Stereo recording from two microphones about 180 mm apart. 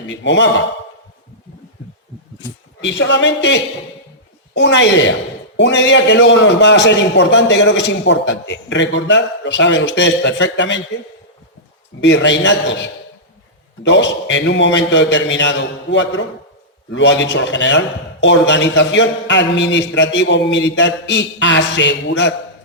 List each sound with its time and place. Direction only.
0.1 s a man's voice: 80° left
2.8 s a man's voice: 85° left
11.9 s a man's voice: 90° left